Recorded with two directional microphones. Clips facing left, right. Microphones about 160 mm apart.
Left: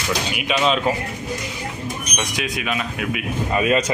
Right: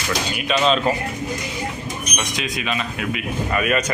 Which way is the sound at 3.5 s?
25° left (ahead or behind).